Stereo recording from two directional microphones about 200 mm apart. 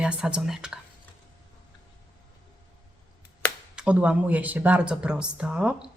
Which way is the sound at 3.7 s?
5° right (ahead or behind).